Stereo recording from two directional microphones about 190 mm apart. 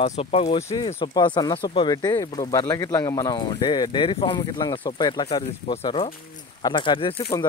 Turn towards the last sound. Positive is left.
turn(degrees=25)  # may be behind; listen again after turning